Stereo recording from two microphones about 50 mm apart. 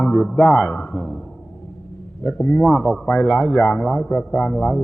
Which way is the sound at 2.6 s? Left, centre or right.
Centre.